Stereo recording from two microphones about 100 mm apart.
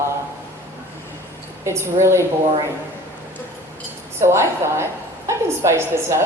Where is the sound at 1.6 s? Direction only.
25° right (ahead or behind).